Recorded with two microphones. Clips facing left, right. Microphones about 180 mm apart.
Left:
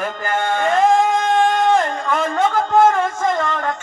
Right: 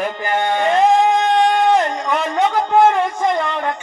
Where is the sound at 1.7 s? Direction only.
15° right (ahead or behind).